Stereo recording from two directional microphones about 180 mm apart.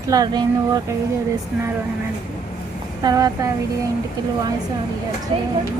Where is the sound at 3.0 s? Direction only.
20° right (ahead or behind).